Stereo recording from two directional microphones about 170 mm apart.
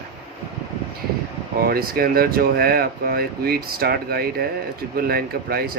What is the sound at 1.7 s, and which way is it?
Speech, 65° right (ahead or behind).